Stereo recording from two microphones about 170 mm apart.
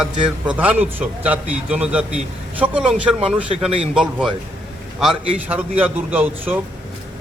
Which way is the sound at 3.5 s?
35° right (ahead or behind).